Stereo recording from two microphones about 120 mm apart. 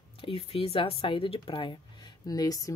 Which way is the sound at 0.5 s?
50° left (ahead or behind).